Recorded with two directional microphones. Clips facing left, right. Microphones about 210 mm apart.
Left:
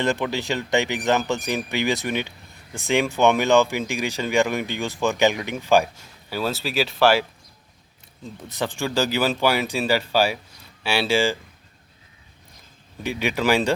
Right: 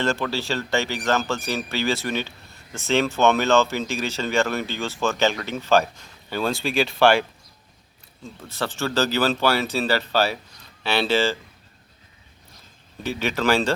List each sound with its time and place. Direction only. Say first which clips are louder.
0.0 s speech: left 1 dB; 15° left (ahead or behind)
8.2 s speech: left 1 dB; 15° left (ahead or behind)
13.0 s speech: left 1 dB; 15° left (ahead or behind)